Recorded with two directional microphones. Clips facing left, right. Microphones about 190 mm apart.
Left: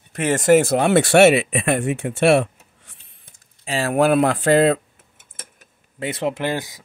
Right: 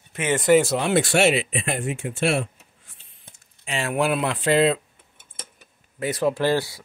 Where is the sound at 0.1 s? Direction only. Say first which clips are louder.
Left 3 dB; 40° left (ahead or behind); by 3.0 s 70° left (ahead or behind).